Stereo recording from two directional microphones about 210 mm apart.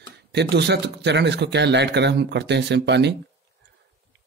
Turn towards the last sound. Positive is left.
turn(degrees=-55)  # may be behind; listen again after turning